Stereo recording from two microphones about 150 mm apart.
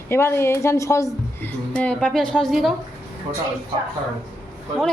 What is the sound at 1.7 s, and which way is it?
A woman's voice, 10° left (ahead or behind).